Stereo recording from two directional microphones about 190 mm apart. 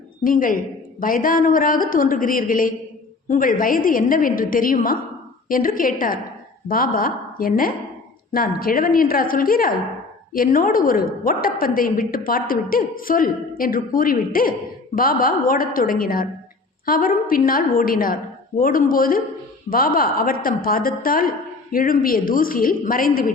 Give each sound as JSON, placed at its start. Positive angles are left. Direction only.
{"t": 0.3, "sound": "a woman's voice", "side_deg": 45}